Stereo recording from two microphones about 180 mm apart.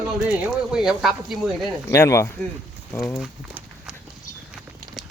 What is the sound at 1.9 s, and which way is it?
Speech, 15° left (ahead or behind).